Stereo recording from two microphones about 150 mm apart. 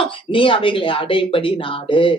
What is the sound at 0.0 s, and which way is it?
Speech, 35° left (ahead or behind).